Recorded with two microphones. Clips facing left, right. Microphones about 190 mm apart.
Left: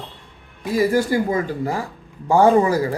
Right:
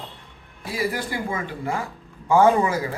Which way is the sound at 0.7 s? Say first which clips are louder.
Left 9 dB; 45° left (ahead or behind).